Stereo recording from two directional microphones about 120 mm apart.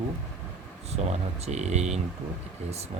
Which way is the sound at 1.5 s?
70° right (ahead or behind).